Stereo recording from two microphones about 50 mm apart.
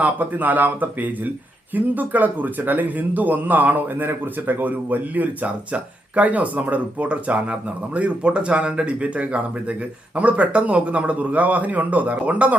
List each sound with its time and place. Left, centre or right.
0.0 s a man's voice: right